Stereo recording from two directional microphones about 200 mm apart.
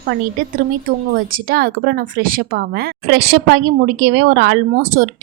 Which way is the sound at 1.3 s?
45° right (ahead or behind).